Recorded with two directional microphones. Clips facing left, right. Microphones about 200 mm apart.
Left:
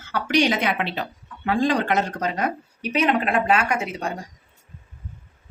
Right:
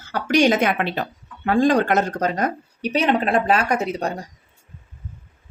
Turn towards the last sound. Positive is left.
turn(degrees=-40)  # may be behind; listen again after turning